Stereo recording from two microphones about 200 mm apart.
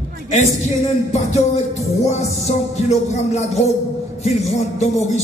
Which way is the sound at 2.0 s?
35° left (ahead or behind).